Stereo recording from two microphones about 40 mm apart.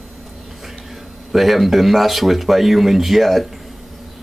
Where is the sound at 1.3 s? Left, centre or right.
Centre.